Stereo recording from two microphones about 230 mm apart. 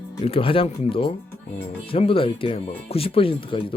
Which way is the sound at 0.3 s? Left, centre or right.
Left.